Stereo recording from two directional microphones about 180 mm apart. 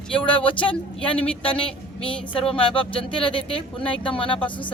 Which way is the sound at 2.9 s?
30° left (ahead or behind).